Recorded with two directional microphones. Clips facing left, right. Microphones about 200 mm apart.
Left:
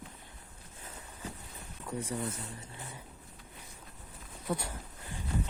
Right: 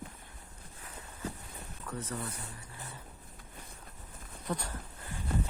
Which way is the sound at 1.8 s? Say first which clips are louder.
Left 3 dB; 10° left (ahead or behind).